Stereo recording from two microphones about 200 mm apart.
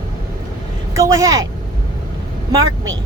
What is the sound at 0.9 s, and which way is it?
Speech, 15° right (ahead or behind).